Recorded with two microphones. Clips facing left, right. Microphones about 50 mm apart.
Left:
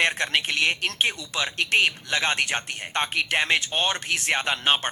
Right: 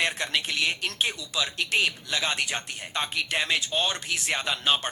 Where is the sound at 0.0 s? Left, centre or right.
Left.